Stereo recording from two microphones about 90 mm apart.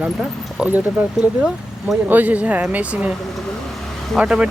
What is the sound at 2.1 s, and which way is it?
Speech, 20° right (ahead or behind).